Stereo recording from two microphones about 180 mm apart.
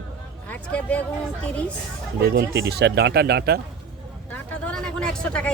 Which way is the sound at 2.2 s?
65° right (ahead or behind).